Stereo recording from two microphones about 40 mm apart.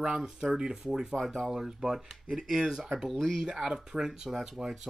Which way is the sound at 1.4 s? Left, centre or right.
Centre.